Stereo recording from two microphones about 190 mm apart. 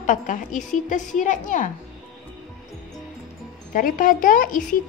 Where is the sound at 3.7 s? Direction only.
45° left (ahead or behind).